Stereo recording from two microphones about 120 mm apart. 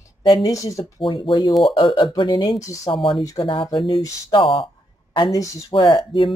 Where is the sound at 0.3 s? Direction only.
30° left (ahead or behind).